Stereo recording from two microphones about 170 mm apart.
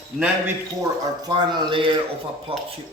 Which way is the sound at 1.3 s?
30° right (ahead or behind).